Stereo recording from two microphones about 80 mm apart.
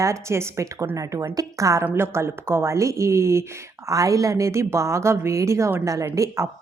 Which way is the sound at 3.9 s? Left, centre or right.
Right.